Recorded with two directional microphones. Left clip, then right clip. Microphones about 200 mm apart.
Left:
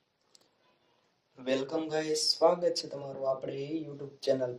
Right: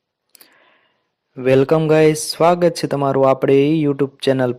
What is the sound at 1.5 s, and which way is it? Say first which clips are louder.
Speech: right 18 dB; 10° right (ahead or behind).